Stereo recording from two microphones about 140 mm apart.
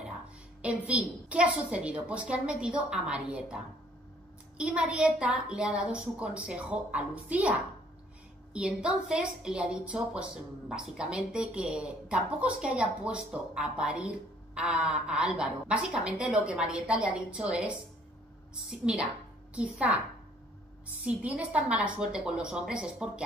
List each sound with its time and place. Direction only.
0.6 s a woman's voice: 10° right (ahead or behind)
8.5 s a woman's voice: 5° right (ahead or behind)